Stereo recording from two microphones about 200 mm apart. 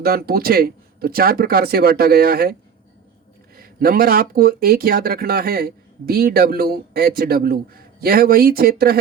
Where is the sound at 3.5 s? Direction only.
50° right (ahead or behind).